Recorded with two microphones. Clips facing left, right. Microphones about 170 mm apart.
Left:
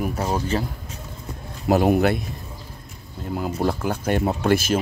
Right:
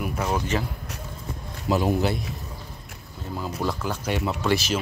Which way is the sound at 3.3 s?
55° left (ahead or behind).